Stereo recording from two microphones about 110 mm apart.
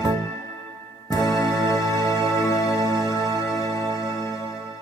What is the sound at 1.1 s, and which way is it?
Music, 30° left (ahead or behind).